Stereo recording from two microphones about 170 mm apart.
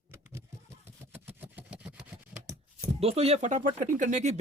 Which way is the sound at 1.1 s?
10° right (ahead or behind).